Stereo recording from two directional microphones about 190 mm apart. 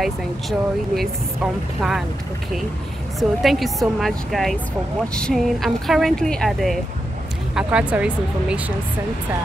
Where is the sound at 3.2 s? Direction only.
Centre (ahead or behind).